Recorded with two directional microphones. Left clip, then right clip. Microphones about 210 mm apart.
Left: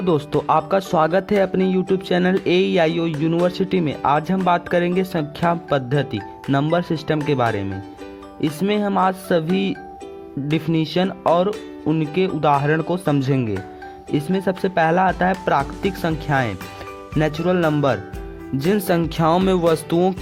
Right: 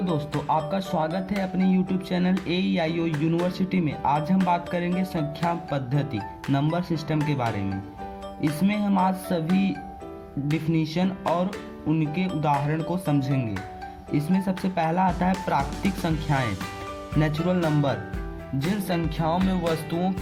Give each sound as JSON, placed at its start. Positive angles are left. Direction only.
{"t": 0.5, "sound": "speech", "side_deg": 55}